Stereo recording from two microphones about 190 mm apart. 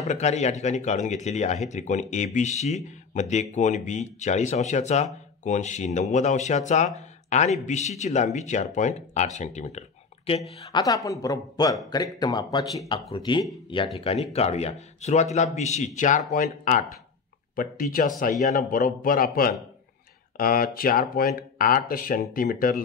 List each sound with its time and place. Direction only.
0.0 s speech: 40° left (ahead or behind)
10.7 s a man's voice: 20° left (ahead or behind); by 22.8 s 50° left (ahead or behind)